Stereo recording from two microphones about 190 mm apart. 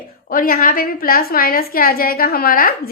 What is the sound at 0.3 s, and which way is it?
A woman's voice, 50° left (ahead or behind).